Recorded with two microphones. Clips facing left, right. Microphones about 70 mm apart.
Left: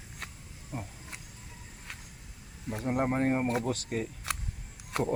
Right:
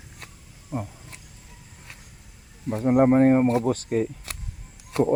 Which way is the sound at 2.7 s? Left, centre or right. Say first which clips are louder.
Right 10 dB; right.